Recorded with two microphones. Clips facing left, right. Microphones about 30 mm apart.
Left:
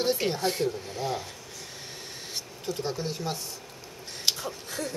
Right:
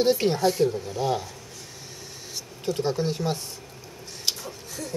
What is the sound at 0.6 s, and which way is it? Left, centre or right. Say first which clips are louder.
Speech: right 6 dB; centre.